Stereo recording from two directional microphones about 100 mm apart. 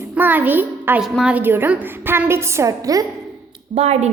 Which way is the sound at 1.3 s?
20° right (ahead or behind).